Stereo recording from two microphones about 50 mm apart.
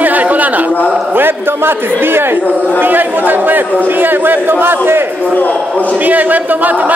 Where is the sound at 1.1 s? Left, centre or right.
Right.